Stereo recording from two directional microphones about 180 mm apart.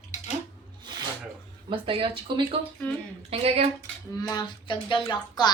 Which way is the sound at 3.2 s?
35° right (ahead or behind).